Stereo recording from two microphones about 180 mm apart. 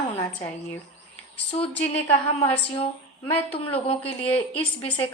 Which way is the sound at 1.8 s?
35° left (ahead or behind).